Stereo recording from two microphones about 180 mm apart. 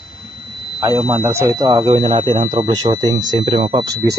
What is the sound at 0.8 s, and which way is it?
Speech, 15° right (ahead or behind).